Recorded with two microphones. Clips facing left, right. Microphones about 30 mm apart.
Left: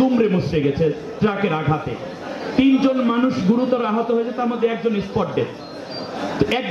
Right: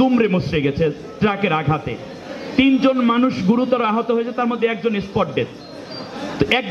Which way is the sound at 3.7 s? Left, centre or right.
Right.